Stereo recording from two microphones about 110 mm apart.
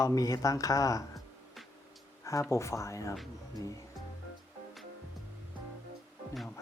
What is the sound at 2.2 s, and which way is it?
Speech, 25° left (ahead or behind).